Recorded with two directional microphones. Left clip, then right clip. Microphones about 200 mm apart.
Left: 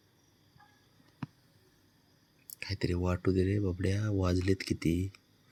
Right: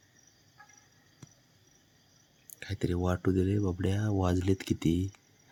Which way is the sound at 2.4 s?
15° right (ahead or behind).